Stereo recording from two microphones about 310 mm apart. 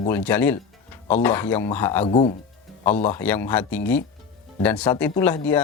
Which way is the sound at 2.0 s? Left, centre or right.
Centre.